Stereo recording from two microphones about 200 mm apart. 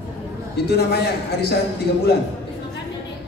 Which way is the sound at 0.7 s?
55° left (ahead or behind).